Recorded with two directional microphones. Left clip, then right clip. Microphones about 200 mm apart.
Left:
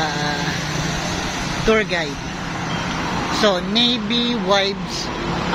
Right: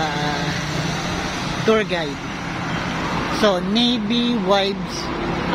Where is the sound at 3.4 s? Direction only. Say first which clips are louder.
Left 1 dB; 15° right (ahead or behind).